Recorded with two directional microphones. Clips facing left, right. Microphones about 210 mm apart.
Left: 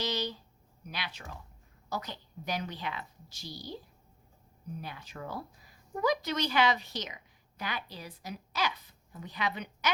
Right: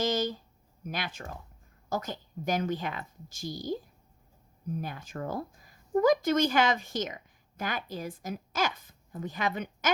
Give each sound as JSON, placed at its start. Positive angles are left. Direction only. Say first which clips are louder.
{"t": 0.0, "sound": "a sound", "louder": "right 6 dB", "side_deg": -50}
{"t": 0.9, "sound": "a woman's voice", "louder": "right 5 dB", "side_deg": -50}
{"t": 4.8, "sound": "a woman's voice", "louder": "right 4 dB", "side_deg": -45}